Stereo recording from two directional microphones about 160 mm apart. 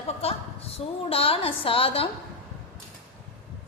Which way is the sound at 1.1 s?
35° left (ahead or behind).